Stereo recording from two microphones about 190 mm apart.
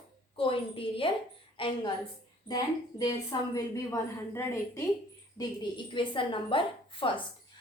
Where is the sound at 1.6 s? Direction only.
25° left (ahead or behind).